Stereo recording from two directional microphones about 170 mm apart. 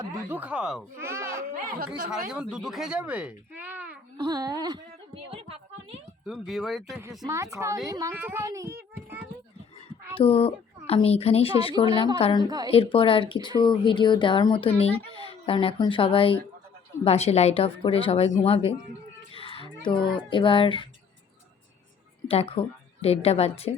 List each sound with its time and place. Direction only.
0.0 s speech: 15° right (ahead or behind)
1.0 s baby cry: 15° right (ahead or behind)
2.3 s speech: 5° right (ahead or behind)
4.2 s speech: 25° right (ahead or behind)
5.3 s a sound: 35° right (ahead or behind)
6.2 s speech: centre (ahead or behind)
7.3 s speech: 15° right (ahead or behind)
10.2 s a woman's voice: 35° left (ahead or behind)
12.5 s speech: 20° right (ahead or behind)
12.7 s speech: 35° left (ahead or behind)
19.3 s a sound: 30° left (ahead or behind)
19.9 s a woman's voice: 30° left (ahead or behind)
22.3 s speech: 35° left (ahead or behind)